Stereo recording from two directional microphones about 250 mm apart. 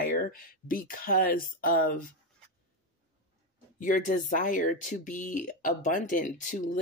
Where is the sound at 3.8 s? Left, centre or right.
Left.